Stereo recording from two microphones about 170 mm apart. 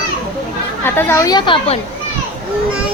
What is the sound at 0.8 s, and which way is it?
Speech, 15° left (ahead or behind).